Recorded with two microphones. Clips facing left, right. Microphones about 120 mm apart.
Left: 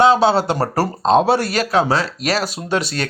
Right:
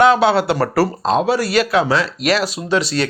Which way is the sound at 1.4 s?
40° left (ahead or behind).